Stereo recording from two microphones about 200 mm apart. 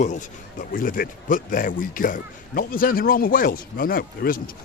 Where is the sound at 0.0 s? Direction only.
40° left (ahead or behind).